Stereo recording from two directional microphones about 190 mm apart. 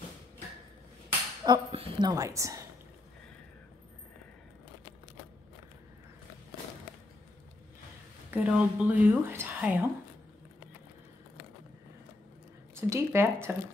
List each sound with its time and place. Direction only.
1.4 s a woman's voice: 25° right (ahead or behind)
8.3 s speech: 5° right (ahead or behind)
12.9 s speech: 15° right (ahead or behind)